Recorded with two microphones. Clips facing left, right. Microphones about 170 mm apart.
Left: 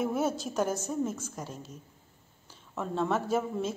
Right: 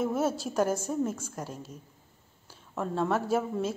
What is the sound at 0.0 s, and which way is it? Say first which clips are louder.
A woman's voice: right 1 dB; centre (ahead or behind).